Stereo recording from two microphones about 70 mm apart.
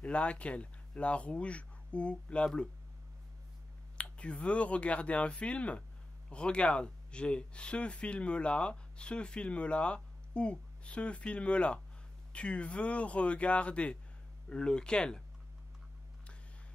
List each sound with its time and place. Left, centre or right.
0.0 s speech: centre
4.0 s speech: centre